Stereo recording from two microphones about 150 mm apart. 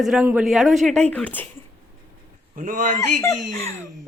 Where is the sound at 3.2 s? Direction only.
20° left (ahead or behind).